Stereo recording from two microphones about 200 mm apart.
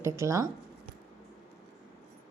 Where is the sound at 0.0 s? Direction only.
15° right (ahead or behind).